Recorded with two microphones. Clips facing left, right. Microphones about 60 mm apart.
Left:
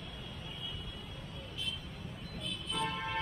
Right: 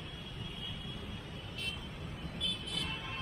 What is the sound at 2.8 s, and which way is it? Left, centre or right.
Music, left.